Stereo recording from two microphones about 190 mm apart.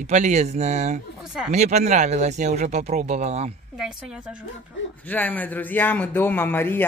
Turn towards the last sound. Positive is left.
turn(degrees=10)  # may be behind; listen again after turning